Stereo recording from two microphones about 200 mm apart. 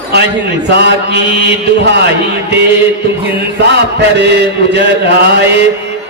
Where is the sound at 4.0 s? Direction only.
55° right (ahead or behind).